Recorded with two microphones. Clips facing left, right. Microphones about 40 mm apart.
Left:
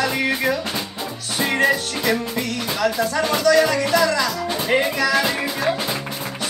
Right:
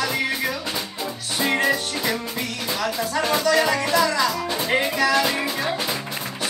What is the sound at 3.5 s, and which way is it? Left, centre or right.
Music, centre.